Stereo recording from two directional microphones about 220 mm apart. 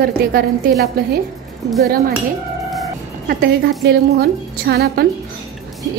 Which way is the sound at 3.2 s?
45° right (ahead or behind).